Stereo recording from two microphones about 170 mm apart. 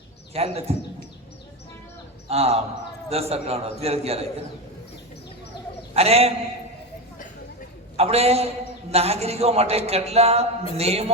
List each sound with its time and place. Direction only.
0.3 s a man's voice: 35° right (ahead or behind)
2.2 s a man's voice: 35° right (ahead or behind)
5.9 s a man's voice: 35° right (ahead or behind)
7.9 s a man's voice: 35° right (ahead or behind)